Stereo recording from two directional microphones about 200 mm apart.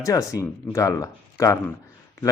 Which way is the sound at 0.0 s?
15° left (ahead or behind).